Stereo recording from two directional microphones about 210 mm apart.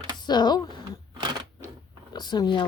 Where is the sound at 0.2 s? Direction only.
20° left (ahead or behind).